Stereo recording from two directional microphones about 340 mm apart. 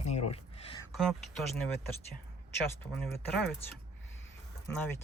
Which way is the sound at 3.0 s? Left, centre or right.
Centre.